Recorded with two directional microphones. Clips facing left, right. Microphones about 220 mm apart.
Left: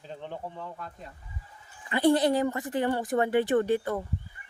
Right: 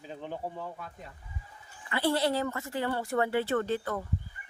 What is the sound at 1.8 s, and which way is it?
Speech, 15° left (ahead or behind).